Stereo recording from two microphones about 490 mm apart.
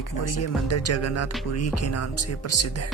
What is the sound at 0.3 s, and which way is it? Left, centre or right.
Speech, left.